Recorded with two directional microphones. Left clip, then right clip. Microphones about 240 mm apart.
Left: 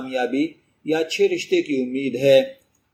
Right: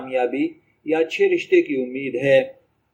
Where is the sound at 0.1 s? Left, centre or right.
Left.